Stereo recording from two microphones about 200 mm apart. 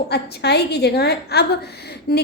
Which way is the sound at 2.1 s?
50° left (ahead or behind).